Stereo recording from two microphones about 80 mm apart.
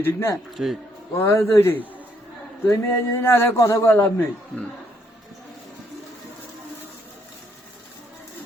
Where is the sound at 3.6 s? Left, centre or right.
Left.